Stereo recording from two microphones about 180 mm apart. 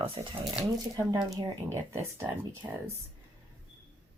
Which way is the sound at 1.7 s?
15° right (ahead or behind).